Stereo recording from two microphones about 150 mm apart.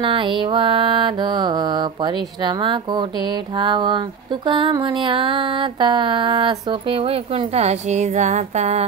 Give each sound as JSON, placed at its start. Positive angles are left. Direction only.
{"t": 0.0, "sound": "mantra", "side_deg": -35}